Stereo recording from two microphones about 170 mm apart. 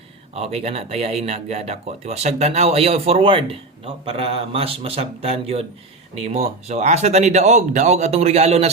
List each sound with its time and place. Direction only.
0.3 s speech: 35° right (ahead or behind)